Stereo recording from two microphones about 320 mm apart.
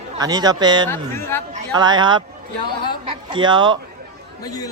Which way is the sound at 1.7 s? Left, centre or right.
Centre.